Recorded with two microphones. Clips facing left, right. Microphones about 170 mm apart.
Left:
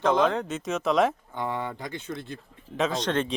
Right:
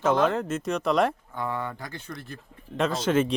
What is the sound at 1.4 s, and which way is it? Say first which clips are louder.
Speech: left 1 dB; 20° left (ahead or behind).